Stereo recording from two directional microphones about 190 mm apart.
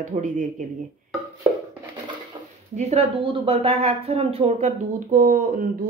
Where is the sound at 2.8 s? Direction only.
35° right (ahead or behind).